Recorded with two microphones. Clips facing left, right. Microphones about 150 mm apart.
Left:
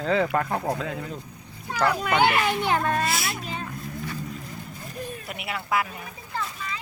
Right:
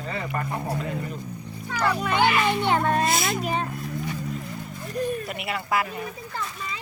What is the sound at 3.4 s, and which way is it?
Speech, 65° right (ahead or behind).